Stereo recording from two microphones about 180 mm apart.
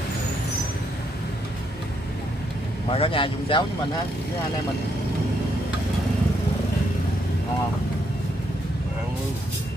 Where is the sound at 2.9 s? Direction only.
30° left (ahead or behind).